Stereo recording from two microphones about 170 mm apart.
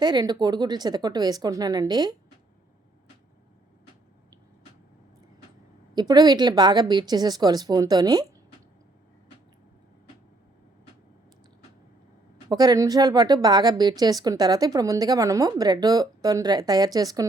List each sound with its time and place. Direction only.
0.0 s speech: 25° right (ahead or behind)
5.9 s speech: 25° right (ahead or behind)
12.5 s speech: 20° right (ahead or behind)